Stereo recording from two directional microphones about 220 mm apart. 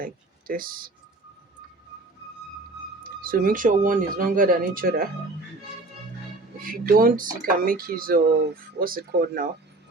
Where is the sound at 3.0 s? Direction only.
40° right (ahead or behind).